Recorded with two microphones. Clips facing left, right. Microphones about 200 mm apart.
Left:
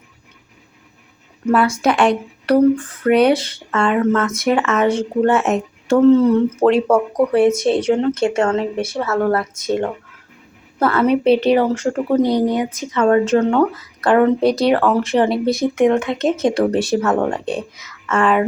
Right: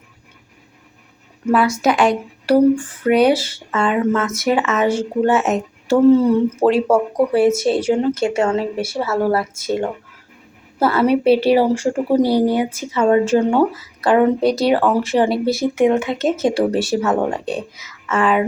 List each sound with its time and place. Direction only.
1.8 s speech: 5° right (ahead or behind)
16.5 s speech: 25° right (ahead or behind)
16.9 s speech: 5° right (ahead or behind)